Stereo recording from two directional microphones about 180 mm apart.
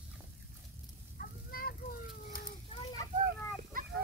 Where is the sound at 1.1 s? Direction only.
55° left (ahead or behind).